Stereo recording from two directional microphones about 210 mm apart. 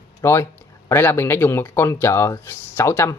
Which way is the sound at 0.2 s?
10° left (ahead or behind).